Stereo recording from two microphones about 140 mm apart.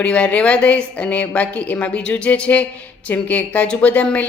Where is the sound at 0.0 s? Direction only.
10° left (ahead or behind).